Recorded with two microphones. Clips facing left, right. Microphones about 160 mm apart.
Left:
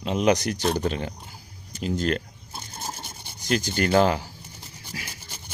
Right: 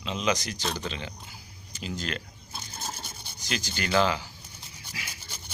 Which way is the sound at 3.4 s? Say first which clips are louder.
Left 9 dB; 50° left (ahead or behind).